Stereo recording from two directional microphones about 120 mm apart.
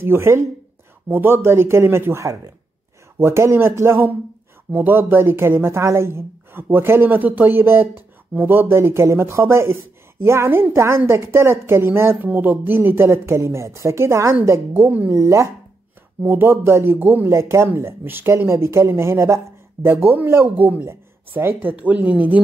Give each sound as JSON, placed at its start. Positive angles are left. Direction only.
{"t": 0.0, "sound": "speech", "side_deg": -20}